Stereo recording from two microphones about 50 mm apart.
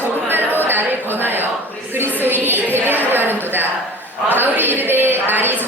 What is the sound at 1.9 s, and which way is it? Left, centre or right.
Music, right.